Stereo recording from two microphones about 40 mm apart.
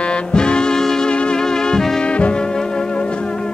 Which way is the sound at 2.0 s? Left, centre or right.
Left.